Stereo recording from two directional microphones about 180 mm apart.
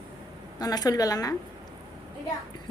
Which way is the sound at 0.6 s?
20° left (ahead or behind).